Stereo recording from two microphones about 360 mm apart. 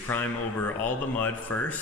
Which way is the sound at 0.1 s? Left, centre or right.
Centre.